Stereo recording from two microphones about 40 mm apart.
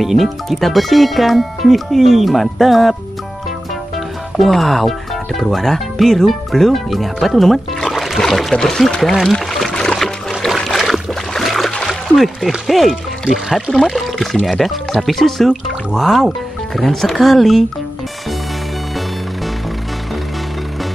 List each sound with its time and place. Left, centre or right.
0.0 s speech: centre
4.4 s speech: centre
7.9 s music: centre
8.2 s speech: centre
9.3 s pour: centre
9.9 s trickle: centre
10.9 s boat: centre
12.2 s speech: centre
14.1 s speech: centre